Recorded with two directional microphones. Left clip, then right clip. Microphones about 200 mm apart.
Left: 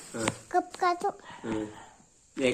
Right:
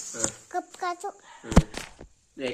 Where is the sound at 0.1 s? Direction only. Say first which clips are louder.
Left 3 dB; centre (ahead or behind).